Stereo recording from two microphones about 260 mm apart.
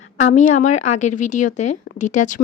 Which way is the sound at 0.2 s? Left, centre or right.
Left.